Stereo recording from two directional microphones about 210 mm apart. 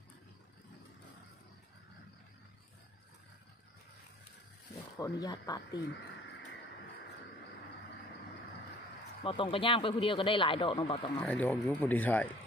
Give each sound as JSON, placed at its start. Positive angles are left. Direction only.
{"t": 4.9, "sound": "speech", "side_deg": 15}
{"t": 9.2, "sound": "speech", "side_deg": 25}
{"t": 11.1, "sound": "speech", "side_deg": 5}